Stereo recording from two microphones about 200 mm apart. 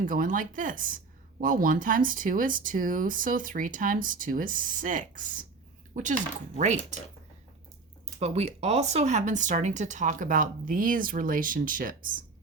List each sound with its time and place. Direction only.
0.0 s speech: 40° right (ahead or behind)
8.2 s speech: 30° right (ahead or behind)